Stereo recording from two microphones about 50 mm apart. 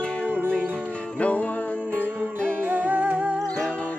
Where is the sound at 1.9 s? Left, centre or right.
Right.